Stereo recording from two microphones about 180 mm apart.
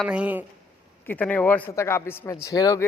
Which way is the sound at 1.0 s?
10° left (ahead or behind).